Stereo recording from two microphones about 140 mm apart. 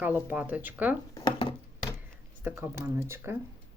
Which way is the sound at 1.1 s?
35° left (ahead or behind).